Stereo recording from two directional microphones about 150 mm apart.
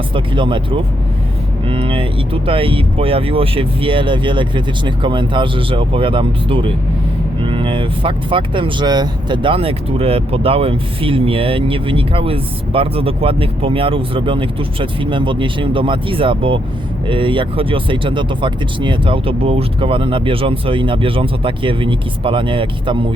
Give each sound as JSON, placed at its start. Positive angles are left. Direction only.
{"t": 0.1, "sound": "speech", "side_deg": -35}